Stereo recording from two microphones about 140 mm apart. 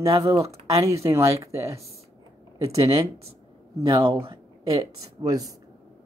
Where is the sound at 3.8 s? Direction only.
30° right (ahead or behind).